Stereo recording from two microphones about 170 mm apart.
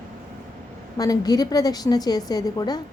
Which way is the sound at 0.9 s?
20° left (ahead or behind).